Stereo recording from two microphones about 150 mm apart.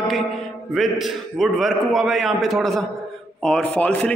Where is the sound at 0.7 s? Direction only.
Centre (ahead or behind).